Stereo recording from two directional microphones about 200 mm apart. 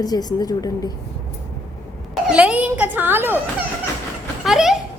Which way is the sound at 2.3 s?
5° right (ahead or behind).